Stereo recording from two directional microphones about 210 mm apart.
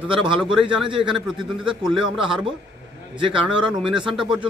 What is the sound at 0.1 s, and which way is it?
Speech, 25° right (ahead or behind).